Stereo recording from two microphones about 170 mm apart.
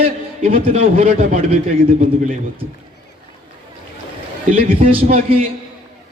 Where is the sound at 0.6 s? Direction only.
35° right (ahead or behind).